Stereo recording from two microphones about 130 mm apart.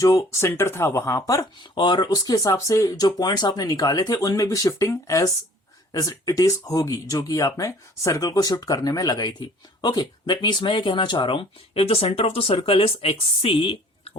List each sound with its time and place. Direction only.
0.0 s speech: 25° left (ahead or behind); by 14.1 s 45° left (ahead or behind)